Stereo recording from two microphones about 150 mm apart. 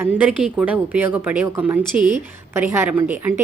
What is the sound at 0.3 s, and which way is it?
Speech, 10° right (ahead or behind).